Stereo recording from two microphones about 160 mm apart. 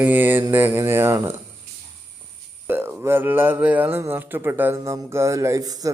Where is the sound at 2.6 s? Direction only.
15° right (ahead or behind).